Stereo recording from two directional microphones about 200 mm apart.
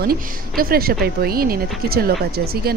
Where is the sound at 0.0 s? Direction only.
45° right (ahead or behind).